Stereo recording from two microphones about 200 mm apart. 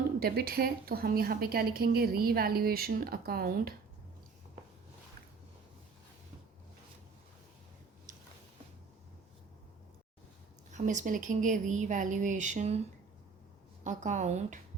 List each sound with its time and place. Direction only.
0.2 s a woman's voice: 50° right (ahead or behind)
10.7 s speech: 35° right (ahead or behind)
13.8 s speech: 35° right (ahead or behind)